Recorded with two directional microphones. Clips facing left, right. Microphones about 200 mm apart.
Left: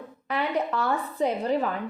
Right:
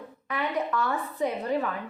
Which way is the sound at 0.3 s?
30° left (ahead or behind).